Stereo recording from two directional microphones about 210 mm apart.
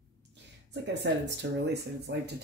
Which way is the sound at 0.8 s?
55° right (ahead or behind).